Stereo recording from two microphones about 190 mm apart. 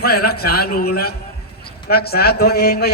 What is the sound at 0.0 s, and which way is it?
A man's voice, 55° left (ahead or behind).